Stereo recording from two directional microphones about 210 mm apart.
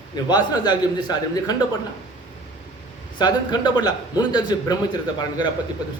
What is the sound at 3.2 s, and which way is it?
Speech, 20° left (ahead or behind).